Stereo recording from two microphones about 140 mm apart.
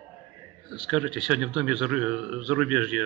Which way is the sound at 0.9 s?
5° right (ahead or behind).